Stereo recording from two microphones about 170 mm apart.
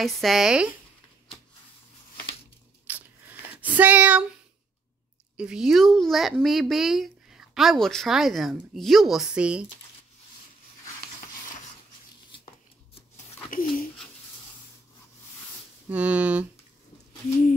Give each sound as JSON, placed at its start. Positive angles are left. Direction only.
{"t": 0.0, "sound": "speech", "side_deg": 0}
{"t": 2.9, "sound": "a sound", "side_deg": -10}
{"t": 5.4, "sound": "speech", "side_deg": -5}
{"t": 13.5, "sound": "speech", "side_deg": 55}
{"t": 15.9, "sound": "speech", "side_deg": -10}